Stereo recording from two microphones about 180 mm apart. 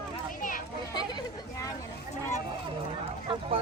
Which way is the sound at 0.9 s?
25° left (ahead or behind).